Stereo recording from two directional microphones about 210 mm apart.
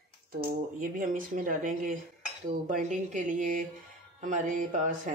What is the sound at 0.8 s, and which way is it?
Speech, 40° right (ahead or behind).